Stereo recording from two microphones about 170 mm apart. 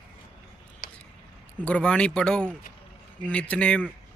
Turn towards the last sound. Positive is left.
turn(degrees=5)  # may be behind; listen again after turning